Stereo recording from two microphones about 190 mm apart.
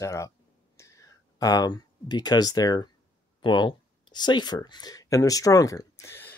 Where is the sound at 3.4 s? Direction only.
25° left (ahead or behind).